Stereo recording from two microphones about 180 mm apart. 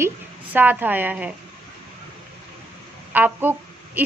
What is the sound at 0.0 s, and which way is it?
A woman's voice, 10° right (ahead or behind).